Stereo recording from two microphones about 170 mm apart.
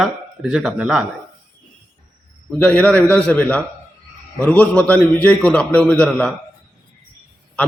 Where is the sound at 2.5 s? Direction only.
5° left (ahead or behind).